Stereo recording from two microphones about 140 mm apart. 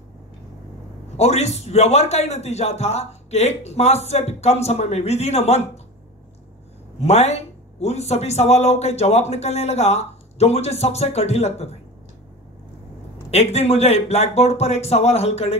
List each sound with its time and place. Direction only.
1.1 s speech: 50° left (ahead or behind)
7.0 s speech: 50° left (ahead or behind)
13.3 s speech: 50° left (ahead or behind)